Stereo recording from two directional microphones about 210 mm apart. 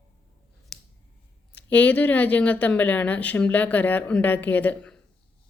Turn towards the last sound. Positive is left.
turn(degrees=5)  # may be behind; listen again after turning